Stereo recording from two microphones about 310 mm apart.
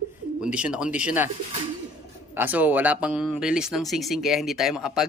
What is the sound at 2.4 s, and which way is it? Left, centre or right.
Speech, centre.